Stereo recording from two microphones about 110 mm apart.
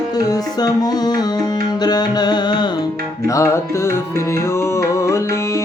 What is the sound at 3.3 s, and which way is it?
Music, 25° left (ahead or behind).